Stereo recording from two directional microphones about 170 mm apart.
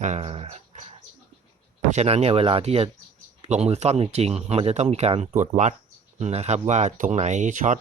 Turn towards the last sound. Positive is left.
turn(degrees=-45)  # may be behind; listen again after turning